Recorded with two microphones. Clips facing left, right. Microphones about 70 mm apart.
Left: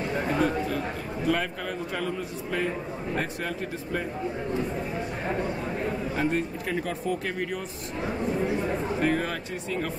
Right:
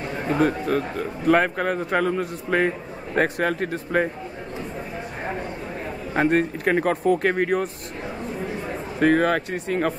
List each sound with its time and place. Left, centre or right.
0.4 s a man's voice: right
6.1 s a man's voice: right
9.0 s speech: right